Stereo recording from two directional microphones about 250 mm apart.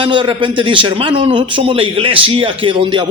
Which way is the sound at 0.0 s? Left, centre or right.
Centre.